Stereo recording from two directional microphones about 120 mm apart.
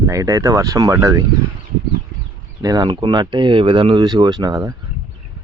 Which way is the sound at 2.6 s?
35° right (ahead or behind).